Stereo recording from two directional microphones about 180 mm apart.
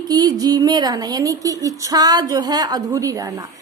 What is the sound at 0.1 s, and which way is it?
A woman's voice, 20° right (ahead or behind).